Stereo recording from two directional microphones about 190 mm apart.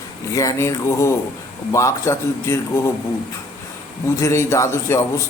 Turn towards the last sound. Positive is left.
turn(degrees=15)  # may be behind; listen again after turning